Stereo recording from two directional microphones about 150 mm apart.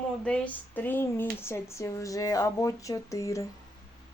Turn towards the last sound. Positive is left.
turn(degrees=20)  # may be behind; listen again after turning